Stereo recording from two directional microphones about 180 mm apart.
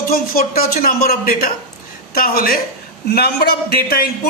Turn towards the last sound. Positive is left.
turn(degrees=55)  # may be behind; listen again after turning